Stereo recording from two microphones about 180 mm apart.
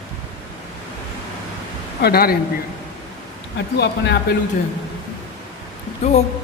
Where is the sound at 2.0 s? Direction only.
60° left (ahead or behind).